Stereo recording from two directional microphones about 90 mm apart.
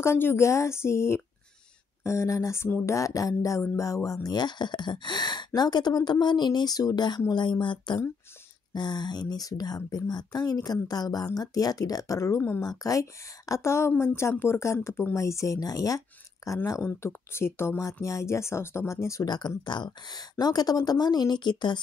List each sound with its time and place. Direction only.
0.0 s a woman's voice: 30° left (ahead or behind)
12.4 s speech: 20° left (ahead or behind)
12.6 s a woman's voice: 40° left (ahead or behind)
17.0 s a woman's voice: 30° left (ahead or behind)
19.2 s speech: 50° left (ahead or behind)